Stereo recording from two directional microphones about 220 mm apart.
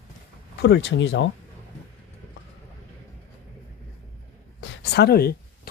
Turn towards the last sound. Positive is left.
turn(degrees=45)  # may be behind; listen again after turning